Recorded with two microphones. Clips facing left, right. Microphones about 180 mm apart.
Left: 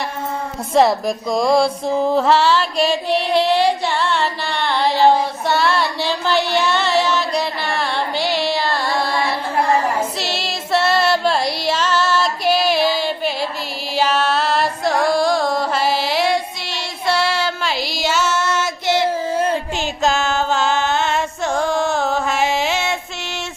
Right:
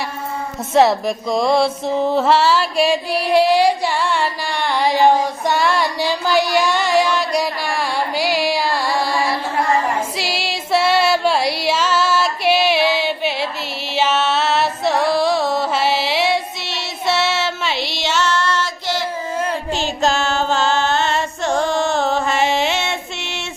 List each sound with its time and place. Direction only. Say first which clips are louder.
0.7 s music: right 1 dB; centre (ahead or behind)
10.2 s female singing: right 1 dB; 10° right (ahead or behind)
13.9 s music: even; centre (ahead or behind)
19.3 s a sound: left 3 dB; 30° left (ahead or behind)
20.0 s music: left 1 dB; 5° left (ahead or behind)